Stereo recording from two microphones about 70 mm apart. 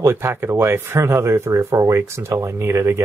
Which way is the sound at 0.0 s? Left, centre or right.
Right.